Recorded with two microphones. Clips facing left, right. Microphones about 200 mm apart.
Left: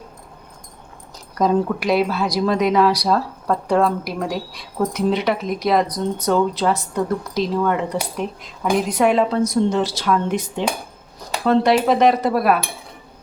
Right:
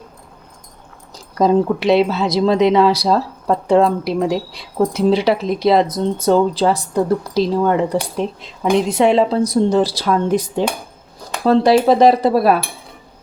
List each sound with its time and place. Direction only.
1.1 s a woman's voice: 30° right (ahead or behind)